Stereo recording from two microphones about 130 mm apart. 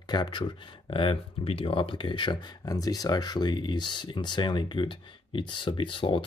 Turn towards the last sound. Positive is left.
turn(degrees=40)  # may be behind; listen again after turning